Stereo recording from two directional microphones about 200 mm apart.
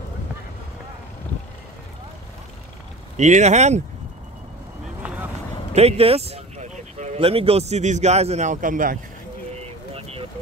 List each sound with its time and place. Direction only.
3.2 s speech: 35° right (ahead or behind)
5.0 s vehicle: 5° right (ahead or behind)
5.7 s speech: 30° right (ahead or behind)
9.9 s vehicle: 30° right (ahead or behind)